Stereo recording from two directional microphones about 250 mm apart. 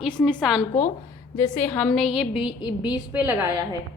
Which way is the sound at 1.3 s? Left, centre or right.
Centre.